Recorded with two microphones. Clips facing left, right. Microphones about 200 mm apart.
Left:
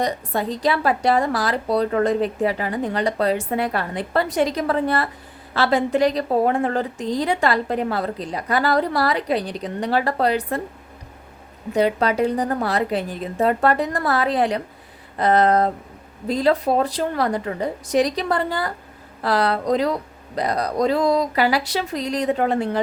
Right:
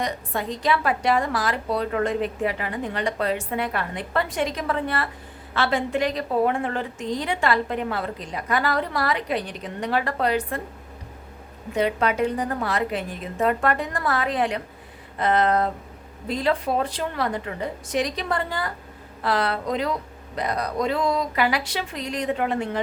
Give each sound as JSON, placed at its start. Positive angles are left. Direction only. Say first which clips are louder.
{"t": 0.0, "sound": "speech", "louder": "left 5 dB", "side_deg": 35}
{"t": 11.7, "sound": "speech", "louder": "left 4 dB", "side_deg": 35}